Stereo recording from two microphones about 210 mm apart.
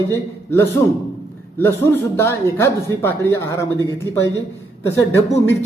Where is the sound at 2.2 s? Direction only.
10° left (ahead or behind).